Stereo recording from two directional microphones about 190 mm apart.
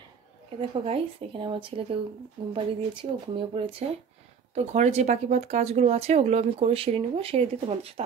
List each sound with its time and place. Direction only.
0.6 s speech: 30° right (ahead or behind)
4.6 s speech: 35° right (ahead or behind)